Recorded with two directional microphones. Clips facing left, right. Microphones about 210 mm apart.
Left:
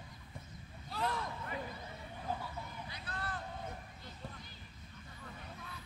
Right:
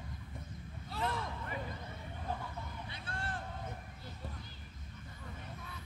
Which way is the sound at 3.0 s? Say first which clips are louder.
Right 1 dB; 30° right (ahead or behind).